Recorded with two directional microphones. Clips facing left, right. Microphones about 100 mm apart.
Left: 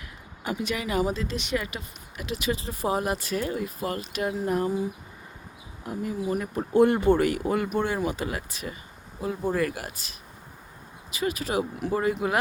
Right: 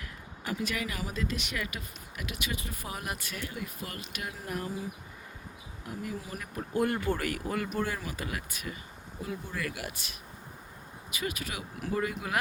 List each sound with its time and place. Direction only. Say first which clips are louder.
0.4 s speech: left 4 dB; 20° left (ahead or behind)
5.8 s speech: left 8 dB; 30° left (ahead or behind)